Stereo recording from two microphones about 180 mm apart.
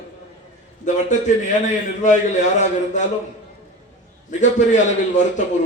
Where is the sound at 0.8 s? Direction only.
45° left (ahead or behind).